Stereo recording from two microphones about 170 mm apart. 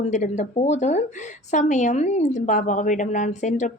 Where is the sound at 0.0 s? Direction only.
45° left (ahead or behind).